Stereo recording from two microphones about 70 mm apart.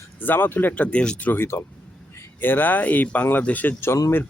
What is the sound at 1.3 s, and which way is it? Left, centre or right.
Speech, left.